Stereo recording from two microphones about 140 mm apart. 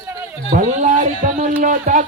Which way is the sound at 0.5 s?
65° right (ahead or behind).